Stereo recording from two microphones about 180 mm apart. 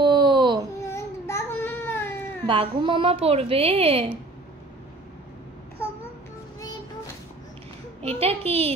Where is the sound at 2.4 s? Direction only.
25° right (ahead or behind).